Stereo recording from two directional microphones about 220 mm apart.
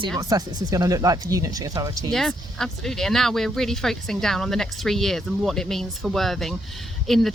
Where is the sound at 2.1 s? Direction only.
Centre (ahead or behind).